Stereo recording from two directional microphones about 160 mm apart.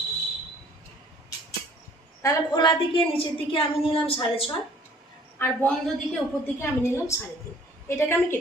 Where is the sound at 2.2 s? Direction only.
30° left (ahead or behind).